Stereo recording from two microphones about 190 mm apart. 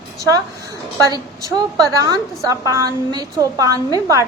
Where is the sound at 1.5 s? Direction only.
20° right (ahead or behind).